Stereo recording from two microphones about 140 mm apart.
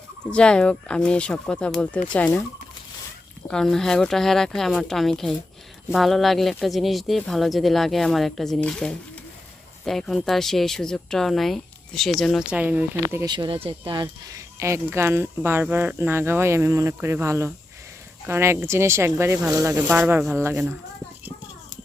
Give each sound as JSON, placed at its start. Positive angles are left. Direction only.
{"t": 0.3, "sound": "speech", "side_deg": 5}
{"t": 3.5, "sound": "speech", "side_deg": 5}
{"t": 12.5, "sound": "speech", "side_deg": -10}
{"t": 13.2, "sound": "speech", "side_deg": -30}
{"t": 14.3, "sound": "speech", "side_deg": -20}